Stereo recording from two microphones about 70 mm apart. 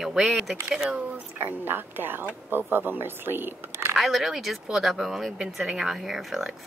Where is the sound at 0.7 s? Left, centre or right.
Centre.